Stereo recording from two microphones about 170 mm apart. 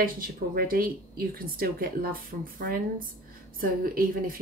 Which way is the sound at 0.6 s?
60° right (ahead or behind).